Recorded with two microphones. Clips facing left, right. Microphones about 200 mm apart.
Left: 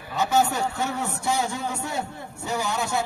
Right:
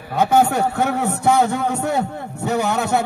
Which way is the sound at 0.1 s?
55° right (ahead or behind).